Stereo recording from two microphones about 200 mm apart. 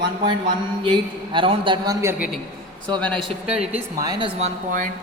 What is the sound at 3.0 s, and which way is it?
A man's voice, 5° left (ahead or behind).